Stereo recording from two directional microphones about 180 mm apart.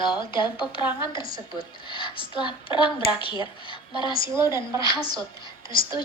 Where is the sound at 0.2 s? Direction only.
25° left (ahead or behind).